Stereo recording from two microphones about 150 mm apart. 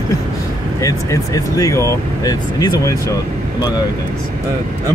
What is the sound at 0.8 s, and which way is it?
Speech, 25° left (ahead or behind).